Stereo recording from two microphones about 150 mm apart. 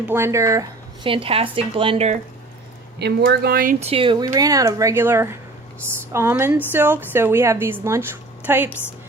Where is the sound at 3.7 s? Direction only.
40° right (ahead or behind).